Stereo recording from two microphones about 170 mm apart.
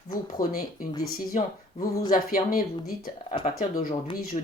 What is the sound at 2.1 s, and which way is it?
Speech, 55° left (ahead or behind).